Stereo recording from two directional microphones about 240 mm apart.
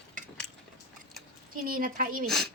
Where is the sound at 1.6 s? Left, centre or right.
Right.